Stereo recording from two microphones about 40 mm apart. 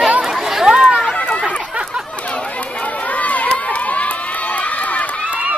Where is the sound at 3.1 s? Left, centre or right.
Left.